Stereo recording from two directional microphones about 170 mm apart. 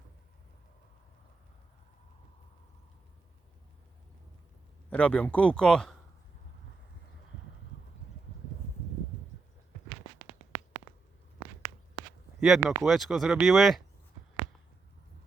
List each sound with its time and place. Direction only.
4.9 s speech: 10° left (ahead or behind)
12.4 s speech: 5° right (ahead or behind)